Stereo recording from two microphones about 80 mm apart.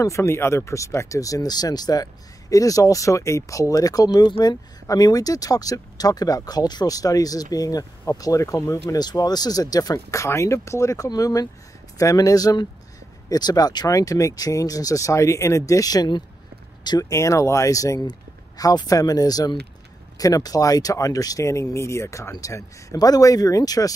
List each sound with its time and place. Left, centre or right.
0.0 s speech: left
9.9 s speech: left
13.8 s speech: left
17.1 s speech: left